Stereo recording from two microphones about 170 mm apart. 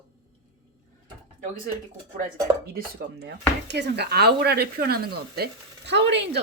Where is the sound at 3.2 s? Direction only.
80° right.